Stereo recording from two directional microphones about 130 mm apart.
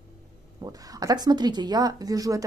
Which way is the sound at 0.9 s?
30° right (ahead or behind).